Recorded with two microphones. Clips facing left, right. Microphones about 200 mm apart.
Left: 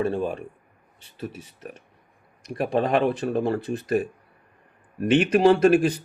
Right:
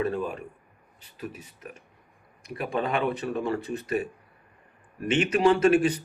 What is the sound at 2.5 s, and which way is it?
Speech, 35° left (ahead or behind).